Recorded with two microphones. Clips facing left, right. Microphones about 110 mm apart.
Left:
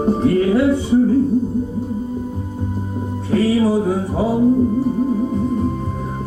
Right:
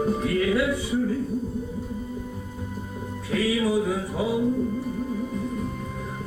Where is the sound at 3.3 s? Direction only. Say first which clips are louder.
Left 7 dB; 35° left (ahead or behind).